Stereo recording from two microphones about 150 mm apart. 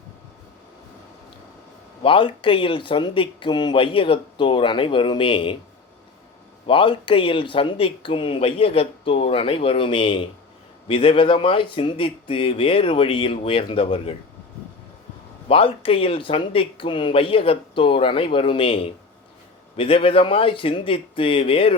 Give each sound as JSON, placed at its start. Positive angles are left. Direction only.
{"t": 2.0, "sound": "speech", "side_deg": 35}
{"t": 6.7, "sound": "speech", "side_deg": 35}
{"t": 15.4, "sound": "speech", "side_deg": 40}